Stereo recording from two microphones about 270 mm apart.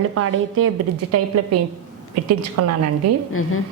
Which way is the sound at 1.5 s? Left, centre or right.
Right.